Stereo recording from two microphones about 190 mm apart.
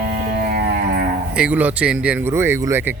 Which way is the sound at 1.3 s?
5° right (ahead or behind).